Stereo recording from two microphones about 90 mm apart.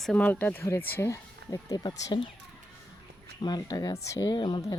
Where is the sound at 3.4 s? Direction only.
50° left (ahead or behind).